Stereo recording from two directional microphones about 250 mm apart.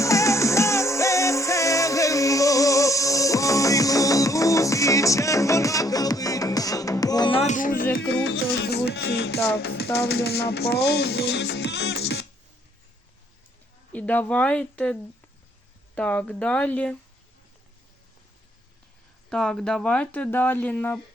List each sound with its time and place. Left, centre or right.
0.0 s music: centre; by 7.9 s left
7.9 s music: left
13.9 s speech: centre
16.0 s speech: centre
19.3 s speech: centre